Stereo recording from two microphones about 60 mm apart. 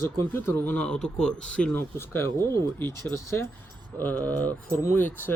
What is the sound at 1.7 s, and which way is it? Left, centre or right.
Speech, left.